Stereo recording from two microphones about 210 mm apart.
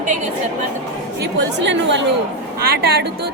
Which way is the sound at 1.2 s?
55° right (ahead or behind).